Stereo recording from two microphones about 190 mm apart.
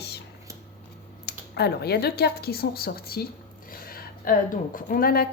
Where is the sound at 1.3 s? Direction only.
60° left (ahead or behind).